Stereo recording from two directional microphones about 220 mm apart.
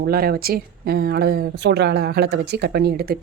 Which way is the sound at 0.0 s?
45° right (ahead or behind).